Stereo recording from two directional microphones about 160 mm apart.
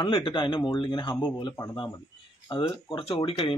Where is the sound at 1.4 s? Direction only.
20° left (ahead or behind).